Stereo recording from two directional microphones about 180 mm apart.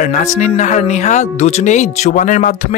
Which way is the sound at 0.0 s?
40° left (ahead or behind).